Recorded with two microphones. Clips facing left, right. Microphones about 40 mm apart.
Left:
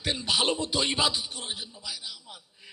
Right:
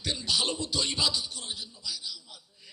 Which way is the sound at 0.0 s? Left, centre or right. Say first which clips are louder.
Left 3 dB; left.